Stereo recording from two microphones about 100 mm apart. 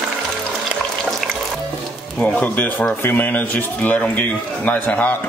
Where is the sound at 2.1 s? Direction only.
15° left (ahead or behind).